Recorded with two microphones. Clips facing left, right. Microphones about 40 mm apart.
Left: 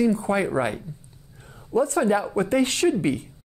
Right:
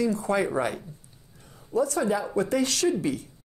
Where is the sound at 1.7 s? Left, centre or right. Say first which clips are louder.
Left 4 dB; left.